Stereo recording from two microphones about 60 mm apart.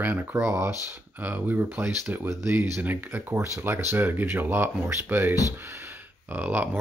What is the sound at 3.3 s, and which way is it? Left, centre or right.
Speech, right.